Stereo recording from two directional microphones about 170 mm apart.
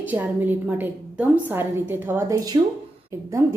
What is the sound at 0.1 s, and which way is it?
A woman's voice, 10° right (ahead or behind).